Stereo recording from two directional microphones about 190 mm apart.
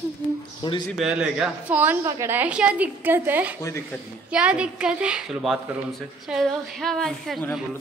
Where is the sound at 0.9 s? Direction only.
5° right (ahead or behind).